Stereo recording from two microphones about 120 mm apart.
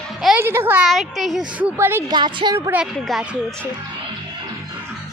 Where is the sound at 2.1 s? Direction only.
40° right (ahead or behind).